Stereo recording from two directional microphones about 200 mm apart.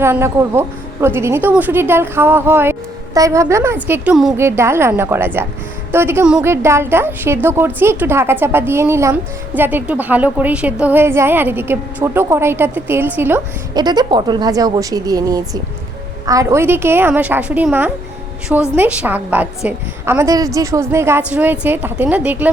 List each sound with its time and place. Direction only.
0.0 s a woman's voice: 10° right (ahead or behind)
4.4 s a woman's voice: 15° right (ahead or behind)
13.7 s a woman's voice: 20° right (ahead or behind)